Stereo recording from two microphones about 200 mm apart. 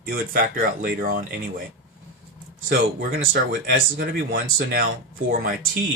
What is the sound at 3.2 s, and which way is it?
Speech, 50° right (ahead or behind).